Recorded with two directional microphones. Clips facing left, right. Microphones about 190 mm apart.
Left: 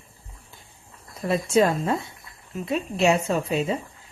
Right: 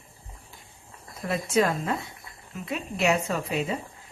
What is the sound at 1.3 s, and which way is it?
Speech, 30° left (ahead or behind).